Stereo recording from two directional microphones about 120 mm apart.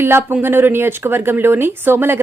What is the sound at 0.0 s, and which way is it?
A woman's voice, 20° right (ahead or behind).